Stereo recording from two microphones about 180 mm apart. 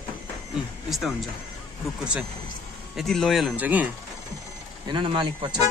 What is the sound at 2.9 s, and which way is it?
Speech, centre (ahead or behind).